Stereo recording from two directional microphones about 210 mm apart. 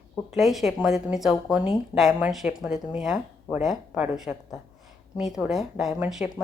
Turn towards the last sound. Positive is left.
turn(degrees=0)  # may be behind; listen again after turning